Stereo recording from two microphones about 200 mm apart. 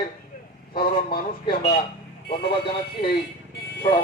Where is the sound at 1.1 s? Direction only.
50° left (ahead or behind).